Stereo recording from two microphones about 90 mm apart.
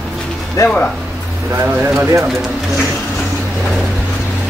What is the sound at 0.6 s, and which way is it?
Speech, 35° left (ahead or behind).